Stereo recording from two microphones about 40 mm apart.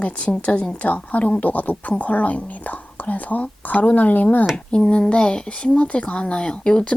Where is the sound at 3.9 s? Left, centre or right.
Left.